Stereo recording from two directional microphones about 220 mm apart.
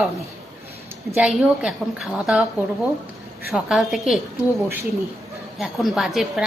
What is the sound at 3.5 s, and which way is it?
Speech, centre (ahead or behind).